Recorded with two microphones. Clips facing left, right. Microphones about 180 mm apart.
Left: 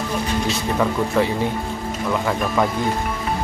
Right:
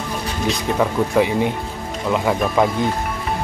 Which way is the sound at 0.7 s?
15° right (ahead or behind).